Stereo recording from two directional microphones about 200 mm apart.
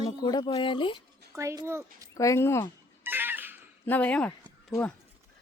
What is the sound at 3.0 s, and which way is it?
Cat, 10° right (ahead or behind).